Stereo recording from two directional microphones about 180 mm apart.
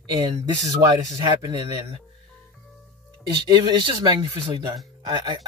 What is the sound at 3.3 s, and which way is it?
Speech, 25° right (ahead or behind).